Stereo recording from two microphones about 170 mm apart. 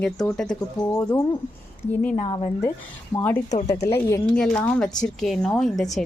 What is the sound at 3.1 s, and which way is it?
A woman's voice, 10° left (ahead or behind).